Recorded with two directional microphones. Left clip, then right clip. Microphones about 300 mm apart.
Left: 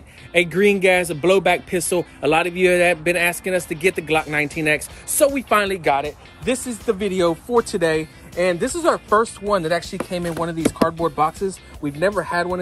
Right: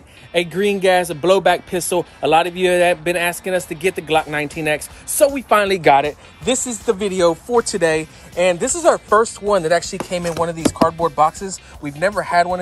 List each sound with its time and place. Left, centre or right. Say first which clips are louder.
0.3 s speech: left 2 dB; centre
5.7 s speech: right 6 dB; right
6.4 s speech: right 3 dB; centre